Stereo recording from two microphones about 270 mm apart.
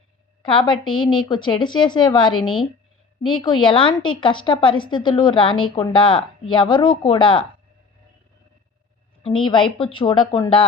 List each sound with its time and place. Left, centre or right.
0.4 s a woman's voice: centre
9.2 s a woman's voice: centre